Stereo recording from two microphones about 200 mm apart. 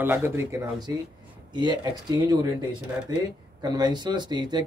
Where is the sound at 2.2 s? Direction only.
20° right (ahead or behind).